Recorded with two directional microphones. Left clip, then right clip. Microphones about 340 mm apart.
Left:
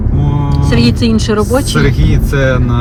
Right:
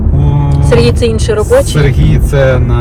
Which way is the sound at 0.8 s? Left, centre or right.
Centre.